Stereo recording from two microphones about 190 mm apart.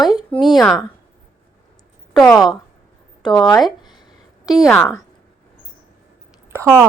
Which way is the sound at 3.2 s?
25° left (ahead or behind).